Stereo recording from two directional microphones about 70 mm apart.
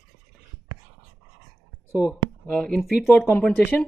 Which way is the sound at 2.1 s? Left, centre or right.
Centre.